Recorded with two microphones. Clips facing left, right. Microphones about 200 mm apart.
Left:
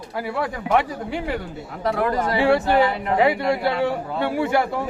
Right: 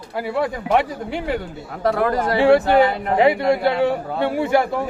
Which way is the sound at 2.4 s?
25° right (ahead or behind).